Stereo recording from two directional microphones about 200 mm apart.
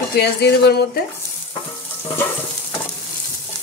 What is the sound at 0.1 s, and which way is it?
Speech, 55° left (ahead or behind).